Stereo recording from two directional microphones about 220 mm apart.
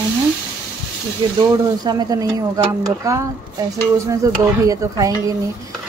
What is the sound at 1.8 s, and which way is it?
A woman's voice, 15° right (ahead or behind).